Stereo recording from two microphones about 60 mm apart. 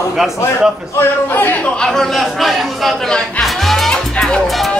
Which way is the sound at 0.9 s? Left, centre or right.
Left.